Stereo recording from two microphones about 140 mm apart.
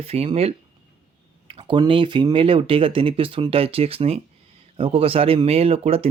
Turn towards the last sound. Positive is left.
turn(degrees=-45)  # may be behind; listen again after turning